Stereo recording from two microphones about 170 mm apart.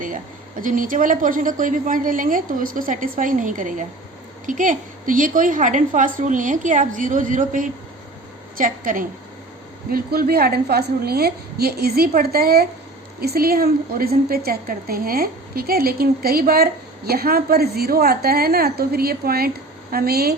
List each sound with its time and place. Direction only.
0.0 s a woman's voice: 50° right (ahead or behind)
9.9 s a woman's voice: 65° right (ahead or behind)